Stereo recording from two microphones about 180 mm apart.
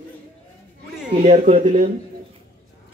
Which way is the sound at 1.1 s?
40° right (ahead or behind).